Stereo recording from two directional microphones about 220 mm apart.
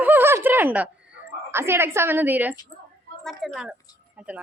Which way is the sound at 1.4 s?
10° right (ahead or behind).